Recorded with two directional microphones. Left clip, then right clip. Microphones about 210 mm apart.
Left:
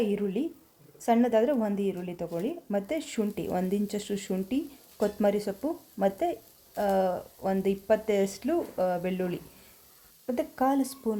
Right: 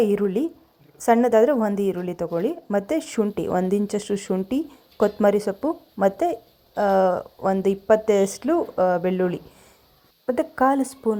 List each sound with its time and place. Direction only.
0.0 s a woman's voice: 15° right (ahead or behind)